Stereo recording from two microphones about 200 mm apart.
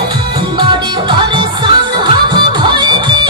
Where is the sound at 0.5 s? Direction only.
25° right (ahead or behind).